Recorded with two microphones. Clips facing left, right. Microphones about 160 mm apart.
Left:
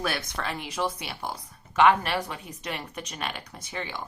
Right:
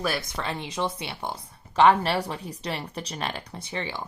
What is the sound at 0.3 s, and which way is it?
A woman's voice, 25° right (ahead or behind).